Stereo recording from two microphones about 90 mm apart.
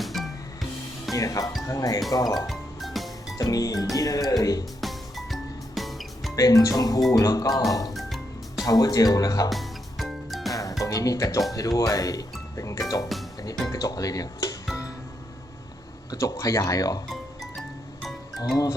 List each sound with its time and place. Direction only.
0.0 s music: centre (ahead or behind)
1.1 s speech: 40° left (ahead or behind)
2.5 s music: centre (ahead or behind)
3.3 s speech: 40° left (ahead or behind)
4.8 s music: centre (ahead or behind)
6.3 s speech: 40° left (ahead or behind)
7.9 s music: centre (ahead or behind)
8.6 s speech: 45° left (ahead or behind)
9.5 s music: centre (ahead or behind)
10.5 s music: 40° left (ahead or behind)
10.8 s speech: 40° left (ahead or behind)
16.1 s speech: 35° left (ahead or behind)
17.1 s music: centre (ahead or behind)